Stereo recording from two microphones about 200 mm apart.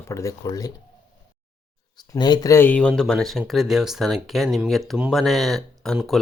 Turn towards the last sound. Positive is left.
turn(degrees=0)  # may be behind; listen again after turning